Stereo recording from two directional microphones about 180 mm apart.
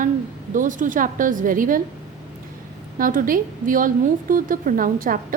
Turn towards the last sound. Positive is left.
turn(degrees=-50)  # may be behind; listen again after turning